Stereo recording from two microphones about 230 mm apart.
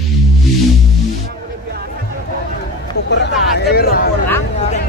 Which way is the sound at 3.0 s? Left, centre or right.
Left.